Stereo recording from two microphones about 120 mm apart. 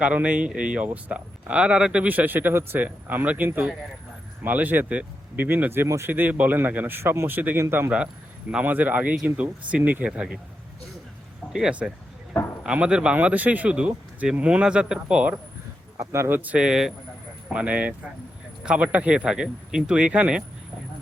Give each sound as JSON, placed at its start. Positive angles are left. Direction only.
{"t": 0.0, "sound": "a man's voice", "side_deg": -10}
{"t": 11.5, "sound": "speech", "side_deg": -5}
{"t": 16.0, "sound": "speech", "side_deg": -25}